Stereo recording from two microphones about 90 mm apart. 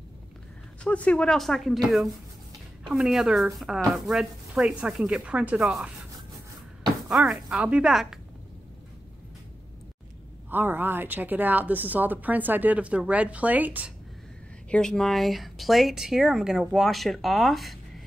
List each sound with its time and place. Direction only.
0.8 s speech: 15° left (ahead or behind)
2.9 s speech: 5° right (ahead or behind)
5.6 s speech: 5° right (ahead or behind)
7.1 s speech: 5° right (ahead or behind)
10.5 s a woman's voice: 20° right (ahead or behind)
14.7 s speech: 5° left (ahead or behind)